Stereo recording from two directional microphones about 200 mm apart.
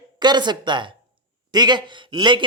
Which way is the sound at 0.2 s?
20° right (ahead or behind).